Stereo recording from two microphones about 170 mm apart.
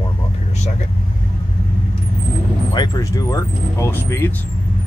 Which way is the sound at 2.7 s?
25° left (ahead or behind).